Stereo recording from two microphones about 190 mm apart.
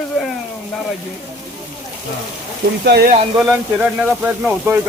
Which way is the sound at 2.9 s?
60° right (ahead or behind).